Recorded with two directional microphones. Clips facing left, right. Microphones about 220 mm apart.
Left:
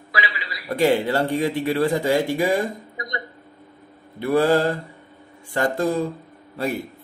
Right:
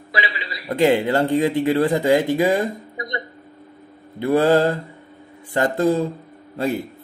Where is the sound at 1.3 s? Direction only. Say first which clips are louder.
Right 4 dB; 20° right (ahead or behind).